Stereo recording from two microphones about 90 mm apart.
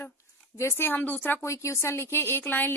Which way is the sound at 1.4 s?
35° left (ahead or behind).